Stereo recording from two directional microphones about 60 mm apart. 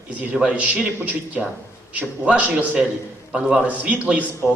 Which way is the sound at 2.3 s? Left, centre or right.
Right.